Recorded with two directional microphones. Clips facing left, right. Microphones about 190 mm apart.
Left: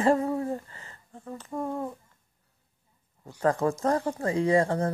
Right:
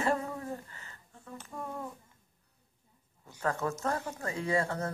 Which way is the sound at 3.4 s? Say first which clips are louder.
Left 7 dB; 35° left (ahead or behind).